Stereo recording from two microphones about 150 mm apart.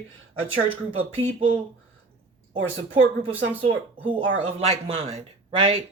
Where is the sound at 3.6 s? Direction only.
35° right (ahead or behind).